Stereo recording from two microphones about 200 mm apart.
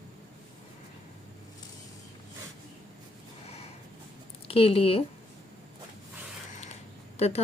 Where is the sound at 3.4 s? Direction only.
30° left (ahead or behind).